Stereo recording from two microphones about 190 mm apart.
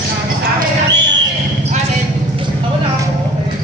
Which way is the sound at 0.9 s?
65° right (ahead or behind).